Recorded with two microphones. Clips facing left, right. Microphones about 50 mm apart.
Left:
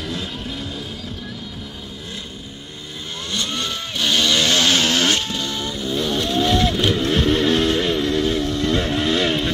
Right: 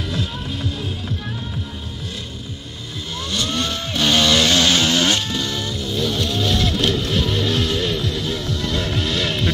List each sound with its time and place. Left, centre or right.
3.3 s vehicle: left
3.5 s vehicle: centre
4.1 s chainsaw: centre
4.5 s chainsaw: centre
4.8 s a sound: left
5.3 s music: left